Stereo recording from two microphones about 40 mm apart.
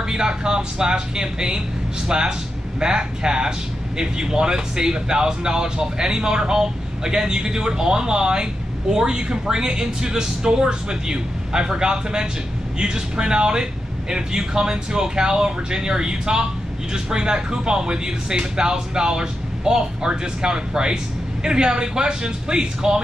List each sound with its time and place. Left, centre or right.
0.1 s speech: centre